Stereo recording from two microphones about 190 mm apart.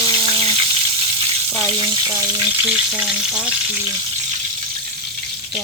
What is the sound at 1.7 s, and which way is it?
Frying, 20° right (ahead or behind).